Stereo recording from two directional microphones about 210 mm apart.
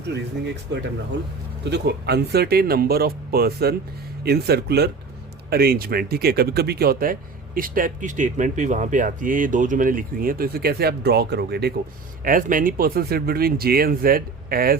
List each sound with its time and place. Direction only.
0.1 s speech: 55° right (ahead or behind)